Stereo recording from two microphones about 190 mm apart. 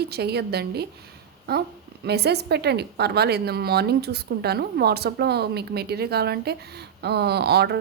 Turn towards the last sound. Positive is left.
turn(degrees=-60)  # may be behind; listen again after turning